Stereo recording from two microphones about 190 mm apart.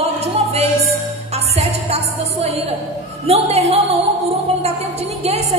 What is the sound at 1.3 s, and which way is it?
Music, 35° right (ahead or behind).